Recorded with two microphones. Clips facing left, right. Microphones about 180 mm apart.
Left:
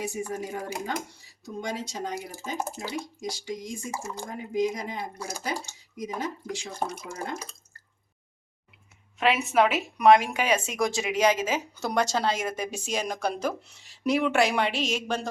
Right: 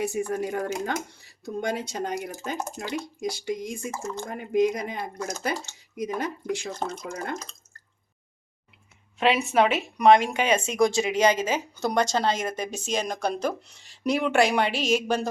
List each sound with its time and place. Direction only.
0.1 s speech: 60° right (ahead or behind)
2.6 s speech: 10° left (ahead or behind)
3.2 s speech: 60° right (ahead or behind)
3.9 s speech: 10° left (ahead or behind)
4.3 s speech: 60° right (ahead or behind)
6.7 s speech: 10° left (ahead or behind)
9.1 s speech: centre (ahead or behind)